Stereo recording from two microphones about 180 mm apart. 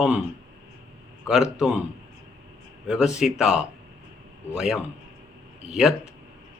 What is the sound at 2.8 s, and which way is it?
Speech, 5° right (ahead or behind).